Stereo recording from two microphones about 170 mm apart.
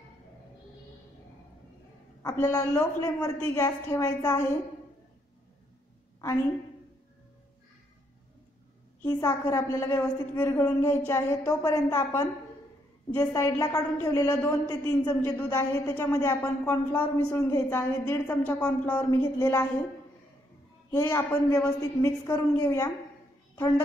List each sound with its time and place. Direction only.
2.2 s a woman's voice: 15° left (ahead or behind)
9.0 s a woman's voice: 15° left (ahead or behind)
13.3 s a woman's voice: 20° left (ahead or behind)
20.9 s a woman's voice: 15° left (ahead or behind)